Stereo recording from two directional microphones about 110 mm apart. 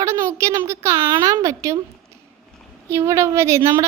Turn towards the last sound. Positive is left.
turn(degrees=-25)  # may be behind; listen again after turning